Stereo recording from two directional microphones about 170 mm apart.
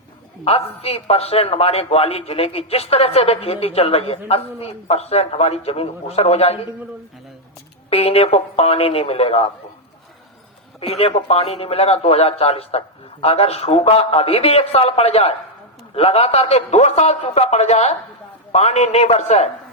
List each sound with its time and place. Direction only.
0.4 s a man's voice: 35° left (ahead or behind)
7.9 s a man's voice: 35° left (ahead or behind)
10.8 s a man's voice: 35° left (ahead or behind)